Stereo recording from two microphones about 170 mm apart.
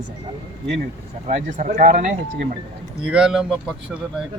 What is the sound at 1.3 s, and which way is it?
Speech, 45° right (ahead or behind).